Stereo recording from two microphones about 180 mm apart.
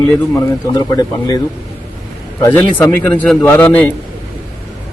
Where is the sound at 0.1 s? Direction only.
20° left (ahead or behind).